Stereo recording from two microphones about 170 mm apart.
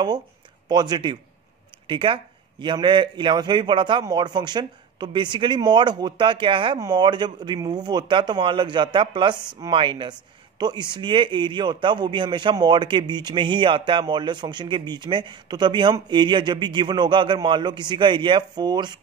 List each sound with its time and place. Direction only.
0.7 s a man's voice: 25° right (ahead or behind)